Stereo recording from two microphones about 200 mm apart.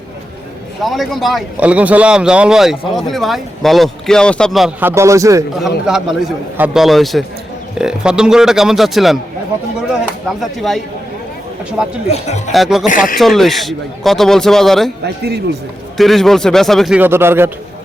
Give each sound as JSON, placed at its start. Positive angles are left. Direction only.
{"t": 0.8, "sound": "speech", "side_deg": 0}
{"t": 5.5, "sound": "speech", "side_deg": 0}
{"t": 10.6, "sound": "speech", "side_deg": 0}
{"t": 12.0, "sound": "speech", "side_deg": 35}
{"t": 12.5, "sound": "speech", "side_deg": 0}
{"t": 12.9, "sound": "a man's voice", "side_deg": 40}
{"t": 13.1, "sound": "speech", "side_deg": 0}
{"t": 15.0, "sound": "speech", "side_deg": -55}
{"t": 16.0, "sound": "speech", "side_deg": 0}